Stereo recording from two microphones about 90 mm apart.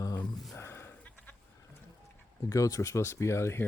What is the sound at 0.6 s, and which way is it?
Sheep, 30° left (ahead or behind).